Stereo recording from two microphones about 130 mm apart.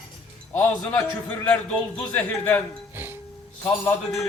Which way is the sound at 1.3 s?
10° left (ahead or behind).